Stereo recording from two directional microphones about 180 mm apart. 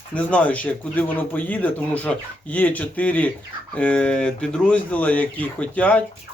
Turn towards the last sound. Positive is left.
turn(degrees=10)  # may be behind; listen again after turning